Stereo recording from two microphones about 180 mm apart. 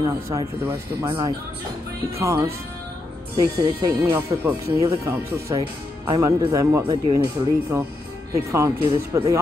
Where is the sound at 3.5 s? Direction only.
20° right (ahead or behind).